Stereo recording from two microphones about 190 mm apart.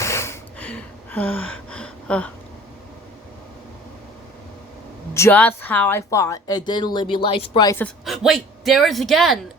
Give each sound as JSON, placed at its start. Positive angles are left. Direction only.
{"t": 0.0, "sound": "gasp", "side_deg": 15}
{"t": 5.1, "sound": "a woman's voice", "side_deg": 10}
{"t": 8.0, "sound": "a man's voice", "side_deg": 0}